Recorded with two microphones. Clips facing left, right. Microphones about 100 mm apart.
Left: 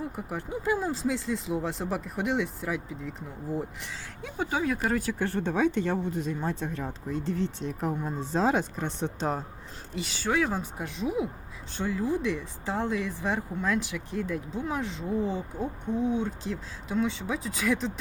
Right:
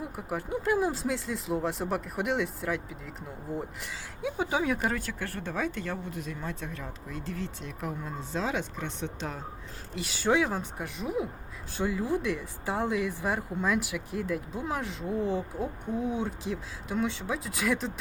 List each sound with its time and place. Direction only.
0.2 s speech: centre (ahead or behind)
4.9 s speech: 15° left (ahead or behind); by 9.4 s 35° left (ahead or behind)
9.9 s speech: 5° right (ahead or behind)
10.2 s speech: 20° right (ahead or behind)
10.5 s speech: centre (ahead or behind)